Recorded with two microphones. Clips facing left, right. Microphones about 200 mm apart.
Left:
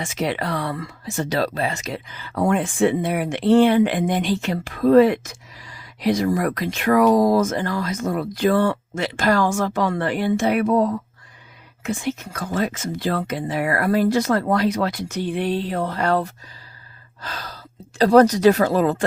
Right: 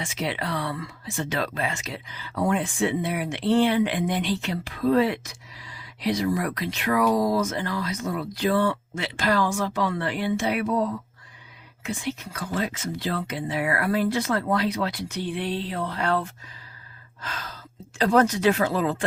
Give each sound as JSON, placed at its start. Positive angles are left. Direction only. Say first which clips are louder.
{"t": 0.0, "sound": "speech", "louder": "left 5 dB", "side_deg": 45}